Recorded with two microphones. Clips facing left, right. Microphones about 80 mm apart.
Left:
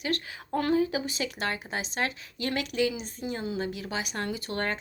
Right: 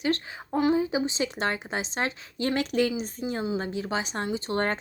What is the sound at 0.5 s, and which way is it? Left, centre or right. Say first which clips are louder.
A woman's voice: right 2 dB; centre.